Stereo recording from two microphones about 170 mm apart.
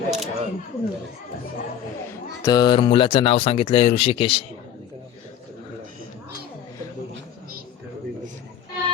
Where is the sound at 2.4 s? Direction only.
25° left (ahead or behind).